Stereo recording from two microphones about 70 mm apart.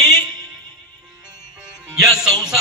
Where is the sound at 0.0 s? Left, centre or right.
Left.